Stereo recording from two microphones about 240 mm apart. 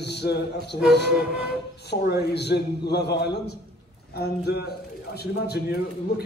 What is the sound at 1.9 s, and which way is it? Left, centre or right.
A man's voice, left.